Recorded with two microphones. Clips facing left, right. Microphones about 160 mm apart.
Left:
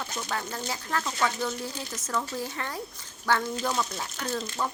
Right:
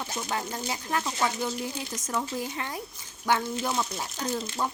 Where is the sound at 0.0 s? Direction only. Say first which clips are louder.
Right 1 dB; 20° right (ahead or behind).